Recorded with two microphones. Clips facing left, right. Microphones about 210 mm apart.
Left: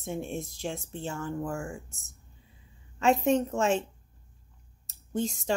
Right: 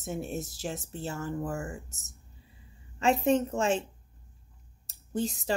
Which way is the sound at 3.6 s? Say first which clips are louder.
Left 1 dB; centre (ahead or behind).